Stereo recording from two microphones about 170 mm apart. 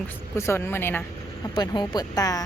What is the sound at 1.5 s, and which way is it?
Speech, 25° left (ahead or behind).